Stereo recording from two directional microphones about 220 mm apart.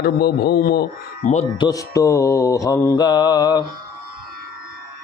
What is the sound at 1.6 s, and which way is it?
Mantra, 15° left (ahead or behind).